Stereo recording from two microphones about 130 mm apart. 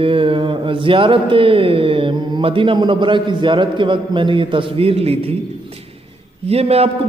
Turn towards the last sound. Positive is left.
turn(degrees=-50)  # may be behind; listen again after turning